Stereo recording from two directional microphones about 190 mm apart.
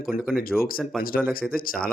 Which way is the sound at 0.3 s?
Centre (ahead or behind).